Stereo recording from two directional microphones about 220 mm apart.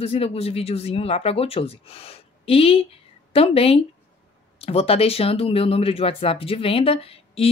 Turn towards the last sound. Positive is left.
turn(degrees=25)  # may be behind; listen again after turning